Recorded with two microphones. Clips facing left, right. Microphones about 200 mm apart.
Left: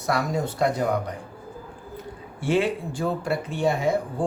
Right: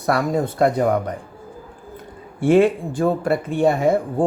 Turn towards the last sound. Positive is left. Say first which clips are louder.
# right 6 dB
turn(degrees=-55)  # may be behind; listen again after turning